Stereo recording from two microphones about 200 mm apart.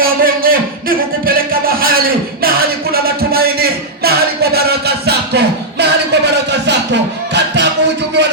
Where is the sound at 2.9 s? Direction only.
50° right (ahead or behind).